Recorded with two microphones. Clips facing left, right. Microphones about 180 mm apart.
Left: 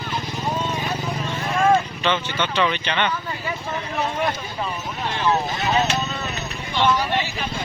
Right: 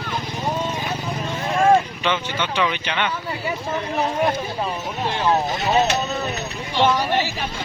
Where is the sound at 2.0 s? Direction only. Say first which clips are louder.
Even; 10° right (ahead or behind).